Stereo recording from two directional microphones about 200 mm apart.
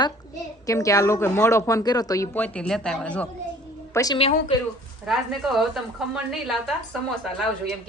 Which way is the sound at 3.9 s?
15° left (ahead or behind).